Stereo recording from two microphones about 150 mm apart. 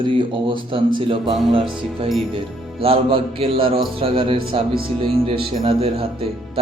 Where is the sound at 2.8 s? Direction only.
40° right (ahead or behind).